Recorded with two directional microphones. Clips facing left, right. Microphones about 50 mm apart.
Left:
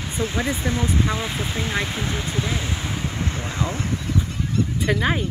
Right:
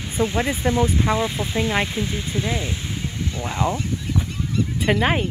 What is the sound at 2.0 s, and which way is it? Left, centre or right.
Speech, left.